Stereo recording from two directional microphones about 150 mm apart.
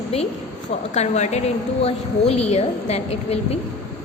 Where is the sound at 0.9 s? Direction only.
50° left (ahead or behind).